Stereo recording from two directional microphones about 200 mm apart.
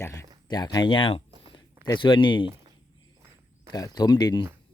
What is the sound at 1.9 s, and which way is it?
Speech, 25° left (ahead or behind).